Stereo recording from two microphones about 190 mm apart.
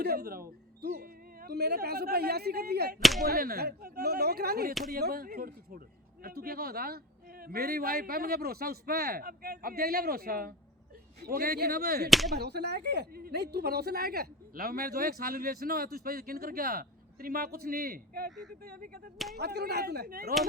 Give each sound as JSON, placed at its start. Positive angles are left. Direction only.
{"t": 0.0, "sound": "speech", "side_deg": -55}
{"t": 3.0, "sound": "whip", "side_deg": 0}
{"t": 3.2, "sound": "speech", "side_deg": -50}
{"t": 12.0, "sound": "whip", "side_deg": 0}
{"t": 12.3, "sound": "speech", "side_deg": -60}
{"t": 18.3, "sound": "whip", "side_deg": 0}
{"t": 18.6, "sound": "speech", "side_deg": -55}